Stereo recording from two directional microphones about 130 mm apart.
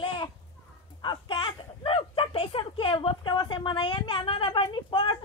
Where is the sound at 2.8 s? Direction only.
40° left (ahead or behind).